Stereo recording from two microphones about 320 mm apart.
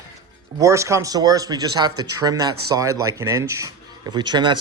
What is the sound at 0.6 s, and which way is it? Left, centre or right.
Speech, centre.